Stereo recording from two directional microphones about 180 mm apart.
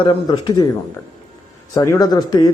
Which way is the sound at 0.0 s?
25° left (ahead or behind).